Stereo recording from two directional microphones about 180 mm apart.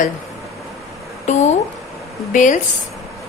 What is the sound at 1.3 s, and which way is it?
A woman's voice, 40° left (ahead or behind).